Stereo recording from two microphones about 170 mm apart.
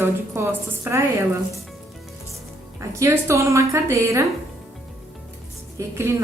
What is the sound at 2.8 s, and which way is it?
A woman's voice, 15° right (ahead or behind).